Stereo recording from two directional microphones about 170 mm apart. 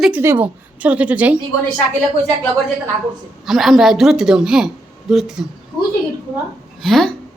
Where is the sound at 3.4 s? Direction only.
Centre (ahead or behind).